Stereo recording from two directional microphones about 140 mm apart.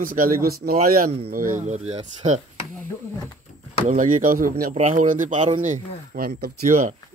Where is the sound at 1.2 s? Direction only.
75° right (ahead or behind); by 2.4 s 55° right (ahead or behind).